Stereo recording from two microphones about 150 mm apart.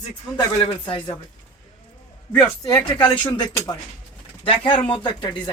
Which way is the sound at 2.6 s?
25° left (ahead or behind).